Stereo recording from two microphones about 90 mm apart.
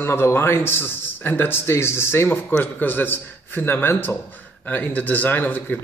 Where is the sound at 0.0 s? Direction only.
30° left (ahead or behind).